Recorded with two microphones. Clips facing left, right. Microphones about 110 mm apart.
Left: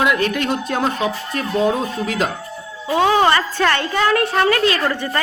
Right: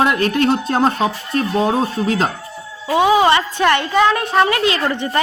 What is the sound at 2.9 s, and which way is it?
A woman's voice, 15° right (ahead or behind).